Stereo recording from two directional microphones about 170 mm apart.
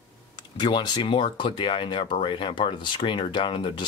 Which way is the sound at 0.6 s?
25° left (ahead or behind).